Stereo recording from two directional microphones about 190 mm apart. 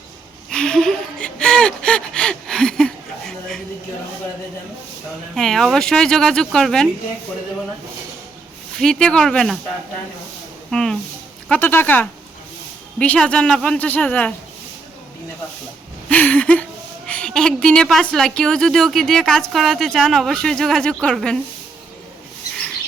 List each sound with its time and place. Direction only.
0.5 s gasp: 5° left (ahead or behind)
5.3 s a woman's voice: centre (ahead or behind)
8.8 s a woman's voice: 5° left (ahead or behind)
10.7 s a woman's voice: 5° left (ahead or behind)
16.0 s a sound: 5° left (ahead or behind)
17.1 s a woman's voice: 5° left (ahead or behind)